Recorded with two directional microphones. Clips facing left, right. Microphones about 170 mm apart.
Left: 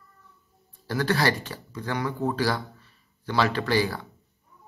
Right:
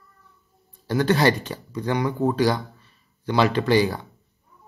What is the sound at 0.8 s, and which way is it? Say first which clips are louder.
A man's voice: right 5 dB; 20° right (ahead or behind).